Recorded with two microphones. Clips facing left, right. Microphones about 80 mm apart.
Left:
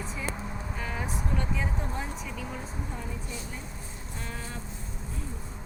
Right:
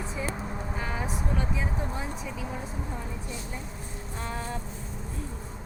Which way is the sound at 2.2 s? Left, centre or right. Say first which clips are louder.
Right 2 dB; centre.